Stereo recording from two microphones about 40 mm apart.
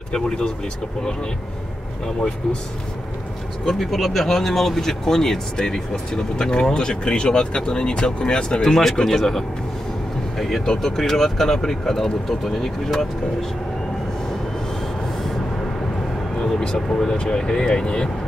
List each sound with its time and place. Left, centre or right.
0.1 s speech: centre
3.6 s speech: centre
16.3 s speech: centre